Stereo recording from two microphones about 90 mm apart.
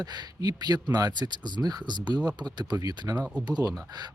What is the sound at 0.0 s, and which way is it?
Speech, 50° right (ahead or behind).